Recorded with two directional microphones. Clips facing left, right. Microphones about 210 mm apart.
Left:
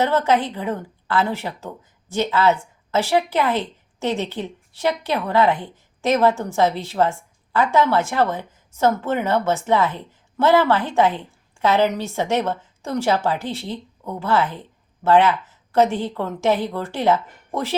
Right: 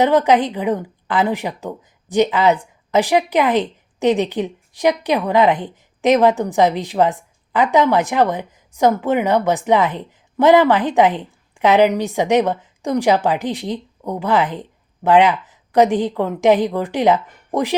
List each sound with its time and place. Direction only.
0.0 s a woman's voice: 15° right (ahead or behind)